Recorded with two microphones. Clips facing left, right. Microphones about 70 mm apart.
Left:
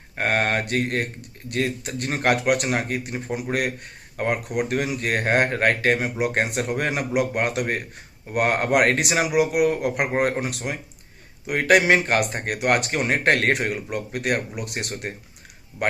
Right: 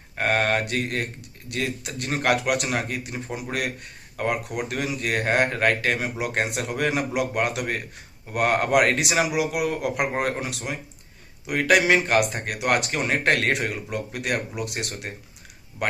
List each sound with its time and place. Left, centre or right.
0.2 s speech: left